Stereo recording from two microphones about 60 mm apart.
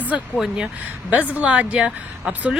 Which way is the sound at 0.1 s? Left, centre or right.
Centre.